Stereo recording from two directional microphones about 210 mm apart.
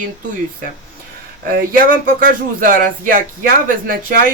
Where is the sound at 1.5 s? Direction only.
40° right (ahead or behind).